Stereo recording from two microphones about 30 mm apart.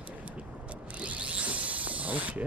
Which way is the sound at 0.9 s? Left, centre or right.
Right.